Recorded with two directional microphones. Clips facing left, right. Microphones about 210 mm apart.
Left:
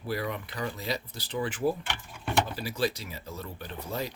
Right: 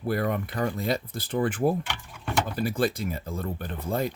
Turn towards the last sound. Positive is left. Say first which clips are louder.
# right 6 dB
turn(degrees=-50)  # may be behind; listen again after turning